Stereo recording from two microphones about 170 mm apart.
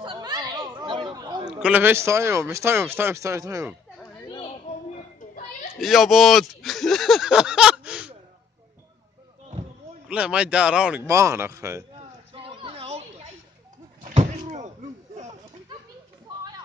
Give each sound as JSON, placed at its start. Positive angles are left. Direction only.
{"t": 0.0, "sound": "chatter", "side_deg": -25}
{"t": 1.6, "sound": "speech", "side_deg": -10}
{"t": 5.8, "sound": "speech", "side_deg": 0}
{"t": 10.0, "sound": "speech", "side_deg": -5}
{"t": 12.4, "sound": "a sound", "side_deg": -35}